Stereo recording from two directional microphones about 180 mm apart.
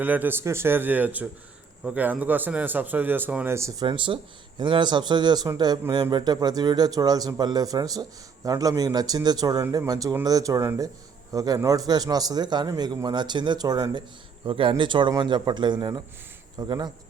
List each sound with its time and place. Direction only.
0.0 s a man's voice: 10° right (ahead or behind)
3.8 s speech: 30° right (ahead or behind)